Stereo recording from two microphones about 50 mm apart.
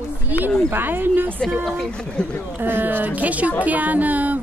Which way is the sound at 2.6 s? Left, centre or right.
Right.